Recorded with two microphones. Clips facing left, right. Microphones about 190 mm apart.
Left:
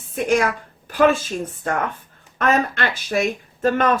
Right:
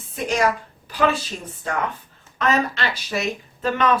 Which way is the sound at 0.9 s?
50° left (ahead or behind).